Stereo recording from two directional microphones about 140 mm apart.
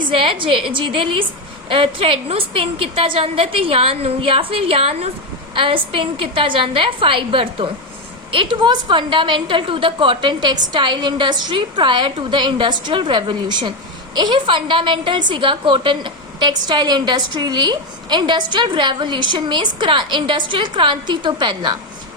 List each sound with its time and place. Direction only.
0.1 s a woman's voice: 40° right (ahead or behind)